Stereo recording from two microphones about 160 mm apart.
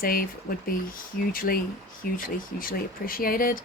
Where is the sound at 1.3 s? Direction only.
60° left (ahead or behind).